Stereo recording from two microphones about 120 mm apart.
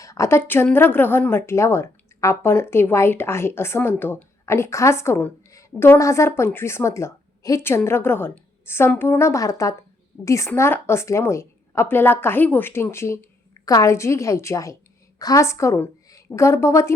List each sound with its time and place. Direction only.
0.0 s a woman's voice: 25° left (ahead or behind)